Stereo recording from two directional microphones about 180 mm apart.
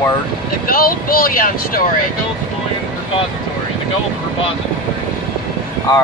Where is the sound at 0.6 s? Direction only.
55° left (ahead or behind).